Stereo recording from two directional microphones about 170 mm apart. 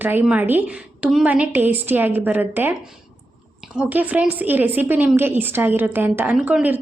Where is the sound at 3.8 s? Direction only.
10° right (ahead or behind).